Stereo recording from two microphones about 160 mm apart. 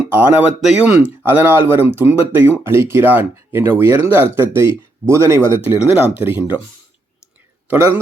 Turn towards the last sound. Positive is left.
turn(degrees=-15)  # may be behind; listen again after turning